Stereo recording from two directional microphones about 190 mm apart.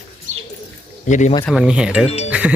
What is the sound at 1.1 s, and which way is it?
Speech, 40° left (ahead or behind).